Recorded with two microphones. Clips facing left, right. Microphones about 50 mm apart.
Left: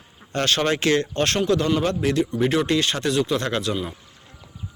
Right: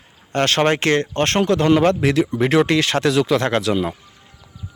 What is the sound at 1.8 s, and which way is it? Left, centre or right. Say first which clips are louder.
Speech: right 5 dB; right.